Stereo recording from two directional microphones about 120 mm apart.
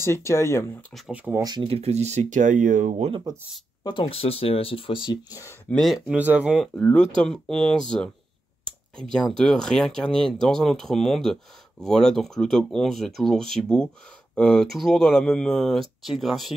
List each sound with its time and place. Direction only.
0.0 s speech: 25° left (ahead or behind)
1.1 s speech: 15° right (ahead or behind)
1.4 s speech: 35° right (ahead or behind)
1.7 s speech: 60° right (ahead or behind); by 3.1 s 90° right
3.8 s speech: 40° left (ahead or behind)
5.7 s speech: centre (ahead or behind)
6.0 s speech: 10° right (ahead or behind)
6.7 s speech: 5° left (ahead or behind)
8.9 s speech: 5° left (ahead or behind)